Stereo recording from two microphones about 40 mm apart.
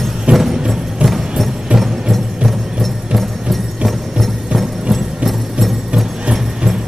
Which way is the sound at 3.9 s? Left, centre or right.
Centre.